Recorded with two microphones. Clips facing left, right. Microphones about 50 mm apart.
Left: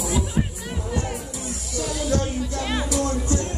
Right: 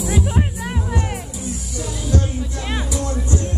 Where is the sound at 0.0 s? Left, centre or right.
Right.